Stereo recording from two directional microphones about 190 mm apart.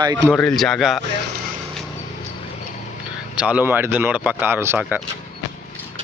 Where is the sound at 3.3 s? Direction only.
5° right (ahead or behind).